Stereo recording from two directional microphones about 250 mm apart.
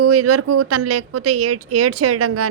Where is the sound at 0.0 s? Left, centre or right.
Right.